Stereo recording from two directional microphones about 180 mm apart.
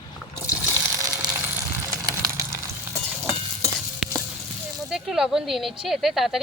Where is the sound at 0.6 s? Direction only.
15° right (ahead or behind).